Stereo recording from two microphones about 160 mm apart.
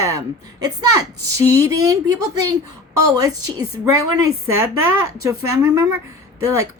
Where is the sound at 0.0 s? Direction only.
20° right (ahead or behind).